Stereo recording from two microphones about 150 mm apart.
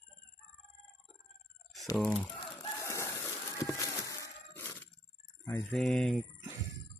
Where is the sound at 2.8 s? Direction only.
20° left (ahead or behind).